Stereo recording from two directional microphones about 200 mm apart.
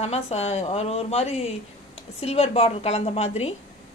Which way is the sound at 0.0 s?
30° left (ahead or behind).